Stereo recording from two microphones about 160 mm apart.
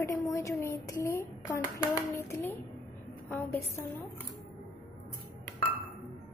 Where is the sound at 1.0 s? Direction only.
20° left (ahead or behind).